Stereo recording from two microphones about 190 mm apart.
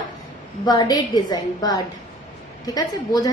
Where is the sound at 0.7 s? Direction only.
20° left (ahead or behind).